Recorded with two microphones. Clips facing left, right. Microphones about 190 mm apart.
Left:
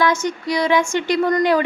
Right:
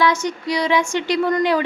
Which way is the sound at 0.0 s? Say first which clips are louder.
Even; 50° left (ahead or behind).